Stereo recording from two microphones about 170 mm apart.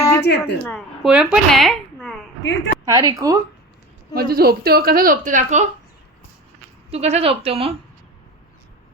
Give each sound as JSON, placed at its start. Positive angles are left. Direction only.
{"t": 0.0, "sound": "a sound", "side_deg": 15}
{"t": 0.3, "sound": "speech", "side_deg": 75}
{"t": 0.6, "sound": "speech", "side_deg": 5}
{"t": 2.4, "sound": "a woman's voice", "side_deg": 90}
{"t": 2.8, "sound": "speech", "side_deg": -20}
{"t": 4.1, "sound": "a woman's voice", "side_deg": -60}
{"t": 6.9, "sound": "speech", "side_deg": -35}